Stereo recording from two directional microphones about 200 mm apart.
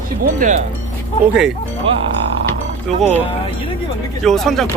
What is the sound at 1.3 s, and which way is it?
Speech, centre (ahead or behind).